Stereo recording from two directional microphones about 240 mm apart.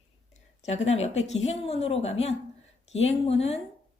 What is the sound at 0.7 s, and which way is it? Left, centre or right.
A woman's voice, left.